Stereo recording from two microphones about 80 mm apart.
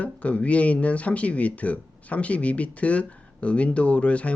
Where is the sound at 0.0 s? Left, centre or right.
Centre.